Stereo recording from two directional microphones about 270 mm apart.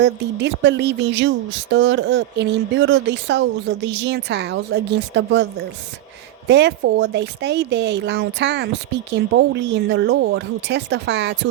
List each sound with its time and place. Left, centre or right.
0.0 s speech: right
6.5 s speech: right